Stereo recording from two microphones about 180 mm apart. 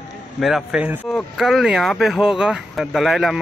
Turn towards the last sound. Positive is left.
turn(degrees=0)  # may be behind; listen again after turning